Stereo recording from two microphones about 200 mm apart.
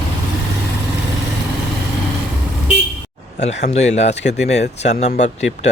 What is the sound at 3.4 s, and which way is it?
Speech, 35° left (ahead or behind).